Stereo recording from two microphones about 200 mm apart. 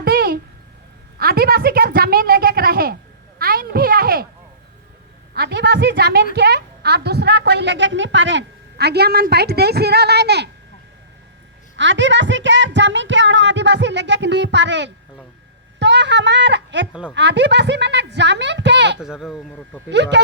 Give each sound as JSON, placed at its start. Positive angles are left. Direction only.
{"t": 0.0, "sound": "a sound", "side_deg": -50}
{"t": 5.3, "sound": "a woman's voice", "side_deg": -55}
{"t": 11.8, "sound": "a woman's voice", "side_deg": -65}
{"t": 19.0, "sound": "speech", "side_deg": 0}
{"t": 19.9, "sound": "a woman's voice", "side_deg": -60}